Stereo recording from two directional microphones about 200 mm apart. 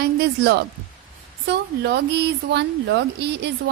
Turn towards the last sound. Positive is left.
turn(degrees=-55)  # may be behind; listen again after turning